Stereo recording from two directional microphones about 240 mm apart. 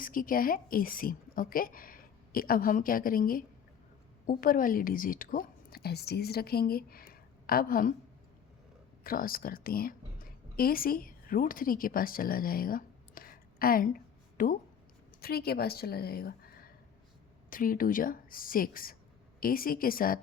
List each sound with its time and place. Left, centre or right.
0.0 s a woman's voice: left
9.0 s a woman's voice: left